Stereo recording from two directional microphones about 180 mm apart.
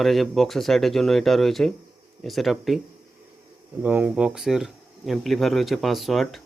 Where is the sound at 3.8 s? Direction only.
10° right (ahead or behind).